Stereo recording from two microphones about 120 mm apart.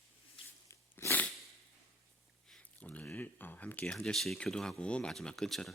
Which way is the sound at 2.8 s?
15° left (ahead or behind).